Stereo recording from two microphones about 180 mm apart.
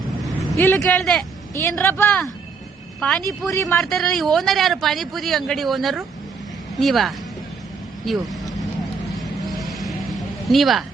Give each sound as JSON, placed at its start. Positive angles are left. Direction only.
{"t": 0.5, "sound": "a man's voice", "side_deg": 15}
{"t": 3.5, "sound": "speech", "side_deg": 15}
{"t": 3.8, "sound": "a man's voice", "side_deg": 0}
{"t": 9.1, "sound": "vehicle", "side_deg": 0}